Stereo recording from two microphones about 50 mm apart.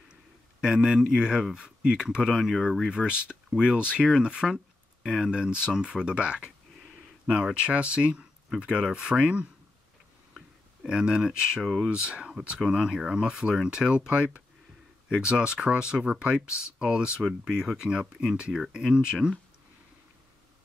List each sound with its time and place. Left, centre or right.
0.6 s speech: centre
2.9 s speech: centre
7.5 s speech: right
10.9 s speech: centre
11.6 s speech: centre
11.9 s speech: centre